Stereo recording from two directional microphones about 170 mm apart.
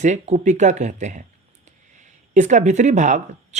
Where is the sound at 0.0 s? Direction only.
45° right (ahead or behind).